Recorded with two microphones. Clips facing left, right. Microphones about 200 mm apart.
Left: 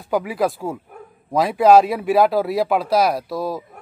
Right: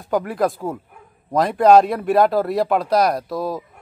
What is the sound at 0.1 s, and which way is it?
A man's voice, 5° left (ahead or behind).